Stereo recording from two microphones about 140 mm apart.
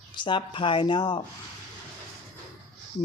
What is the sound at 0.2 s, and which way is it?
Speech, 35° left (ahead or behind).